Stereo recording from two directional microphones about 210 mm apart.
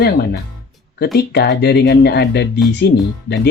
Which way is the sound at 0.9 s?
50° left (ahead or behind).